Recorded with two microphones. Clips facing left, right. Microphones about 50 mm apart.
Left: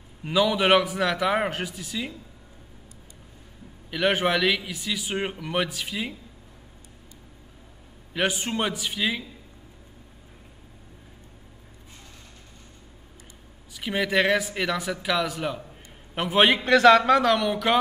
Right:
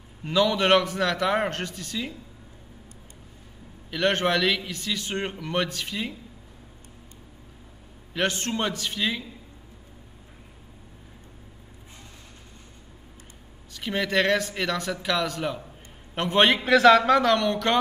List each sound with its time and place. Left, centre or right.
0.2 s speech: centre
3.9 s speech: centre
8.1 s speech: centre
13.7 s a man's voice: centre